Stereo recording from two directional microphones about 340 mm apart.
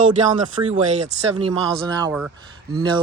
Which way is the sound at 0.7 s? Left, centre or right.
Centre.